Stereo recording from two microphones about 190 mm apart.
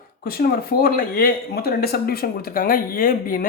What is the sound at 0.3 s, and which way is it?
Speech, 50° left (ahead or behind).